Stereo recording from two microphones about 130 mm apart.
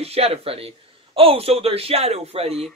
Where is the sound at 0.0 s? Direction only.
50° right (ahead or behind).